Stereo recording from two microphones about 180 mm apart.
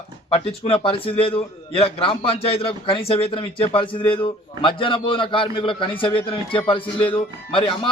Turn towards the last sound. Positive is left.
turn(degrees=30)  # may be behind; listen again after turning